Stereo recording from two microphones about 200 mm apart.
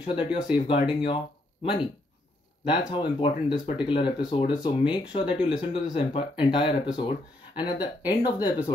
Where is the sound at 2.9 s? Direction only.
25° left (ahead or behind).